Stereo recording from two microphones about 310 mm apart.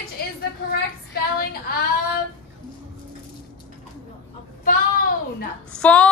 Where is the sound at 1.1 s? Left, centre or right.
Left.